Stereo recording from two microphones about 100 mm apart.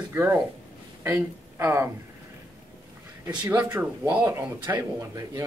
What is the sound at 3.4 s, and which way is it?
Speech, 20° right (ahead or behind).